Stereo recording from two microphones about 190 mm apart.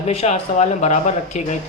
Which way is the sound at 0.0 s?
35° left (ahead or behind).